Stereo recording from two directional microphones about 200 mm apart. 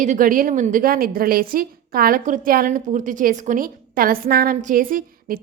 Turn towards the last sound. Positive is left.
turn(degrees=-45)  # may be behind; listen again after turning